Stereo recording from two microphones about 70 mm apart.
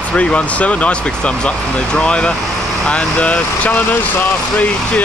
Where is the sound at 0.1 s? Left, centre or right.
Centre.